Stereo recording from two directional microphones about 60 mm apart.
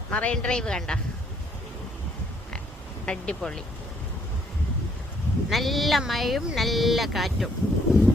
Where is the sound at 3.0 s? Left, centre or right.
Centre.